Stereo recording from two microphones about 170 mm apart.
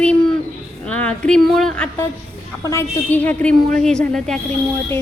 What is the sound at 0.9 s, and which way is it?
A woman's voice, 5° left (ahead or behind).